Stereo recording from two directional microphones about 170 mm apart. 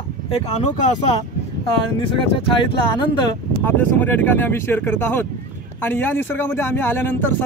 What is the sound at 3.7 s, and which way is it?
Speech, 10° left (ahead or behind).